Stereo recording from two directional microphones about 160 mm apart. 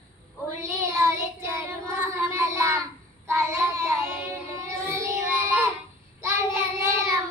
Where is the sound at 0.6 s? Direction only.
20° right (ahead or behind).